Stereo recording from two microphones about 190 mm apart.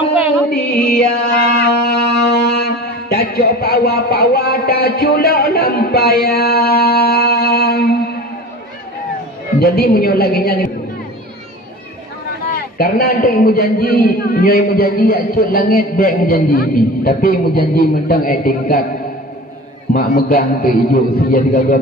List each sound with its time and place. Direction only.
0.5 s a man's voice: 55° left (ahead or behind)
1.6 s music: 55° left (ahead or behind)
9.6 s a woman's voice: 55° left (ahead or behind)
12.7 s a man's voice: 55° left (ahead or behind)
19.9 s a man's voice: 50° left (ahead or behind)